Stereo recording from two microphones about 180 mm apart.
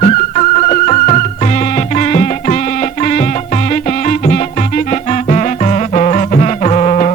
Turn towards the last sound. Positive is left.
turn(degrees=40)  # may be behind; listen again after turning